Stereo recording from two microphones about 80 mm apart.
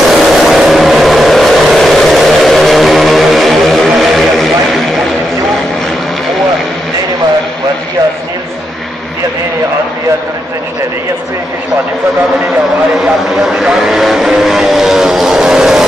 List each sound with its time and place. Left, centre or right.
0.1 s vehicle: centre
13.0 s vehicle: centre